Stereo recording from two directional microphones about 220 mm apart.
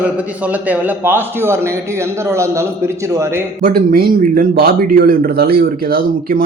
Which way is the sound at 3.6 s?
40° right (ahead or behind).